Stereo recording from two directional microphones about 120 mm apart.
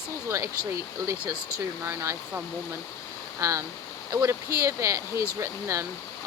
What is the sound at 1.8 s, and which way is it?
Speech, 25° right (ahead or behind).